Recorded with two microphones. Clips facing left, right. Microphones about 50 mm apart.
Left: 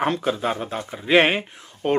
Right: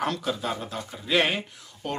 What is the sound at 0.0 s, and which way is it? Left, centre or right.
A man's voice, left.